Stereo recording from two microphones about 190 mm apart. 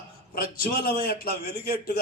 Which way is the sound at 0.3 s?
50° left (ahead or behind).